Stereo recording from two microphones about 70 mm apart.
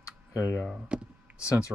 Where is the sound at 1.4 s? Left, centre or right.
Left.